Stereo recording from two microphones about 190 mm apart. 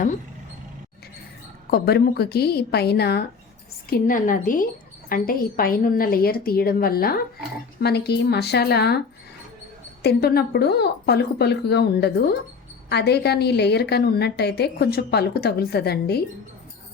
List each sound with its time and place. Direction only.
1.7 s a woman's voice: 55° left (ahead or behind)
3.8 s a woman's voice: 50° left (ahead or behind)
10.0 s a woman's voice: 55° left (ahead or behind)